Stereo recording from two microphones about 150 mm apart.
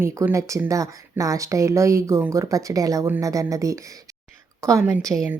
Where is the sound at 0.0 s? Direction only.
15° right (ahead or behind).